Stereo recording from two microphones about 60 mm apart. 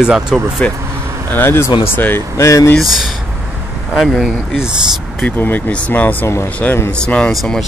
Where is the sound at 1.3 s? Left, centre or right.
Left.